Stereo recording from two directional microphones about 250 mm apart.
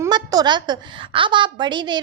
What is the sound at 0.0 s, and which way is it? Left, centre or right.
A woman's voice, centre.